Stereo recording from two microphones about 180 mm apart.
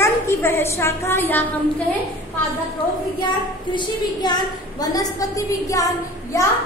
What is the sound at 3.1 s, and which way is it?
A child's voice, 25° left (ahead or behind).